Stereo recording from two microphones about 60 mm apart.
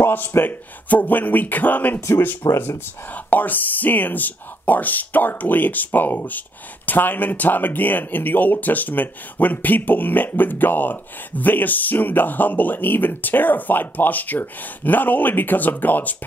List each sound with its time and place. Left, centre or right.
0.0 s speech: left
2.0 s speech: left
2.2 s speech: left